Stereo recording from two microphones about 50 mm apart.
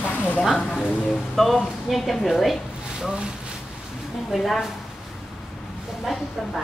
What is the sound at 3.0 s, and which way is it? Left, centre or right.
Speech, centre.